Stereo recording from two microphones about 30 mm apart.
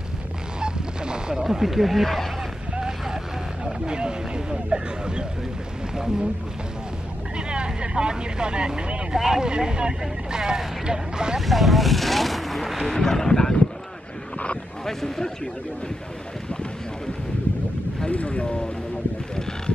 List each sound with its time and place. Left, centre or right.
0.6 s honk: right
1.3 s speech: centre
3.8 s speech: right
7.3 s speech: right
9.1 s speech: right
11.3 s speech: centre
12.9 s speech: centre
14.9 s a man's voice: centre
18.1 s speech: left